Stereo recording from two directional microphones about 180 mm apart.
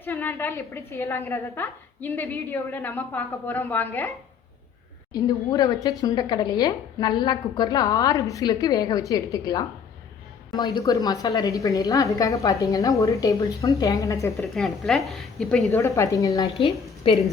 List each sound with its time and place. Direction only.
0.0 s a woman's voice: 15° left (ahead or behind)
5.1 s a woman's voice: 20° left (ahead or behind)
14.3 s a woman's voice: centre (ahead or behind)
16.0 s a woman's voice: 20° left (ahead or behind)
17.0 s a woman's voice: 30° left (ahead or behind)